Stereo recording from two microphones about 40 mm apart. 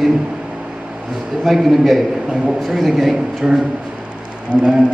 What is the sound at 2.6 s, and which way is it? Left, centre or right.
A man's voice, centre.